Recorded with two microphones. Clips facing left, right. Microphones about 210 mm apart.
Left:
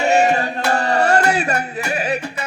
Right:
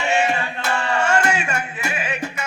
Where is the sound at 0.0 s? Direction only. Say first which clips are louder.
Left 5 dB; 40° left (ahead or behind).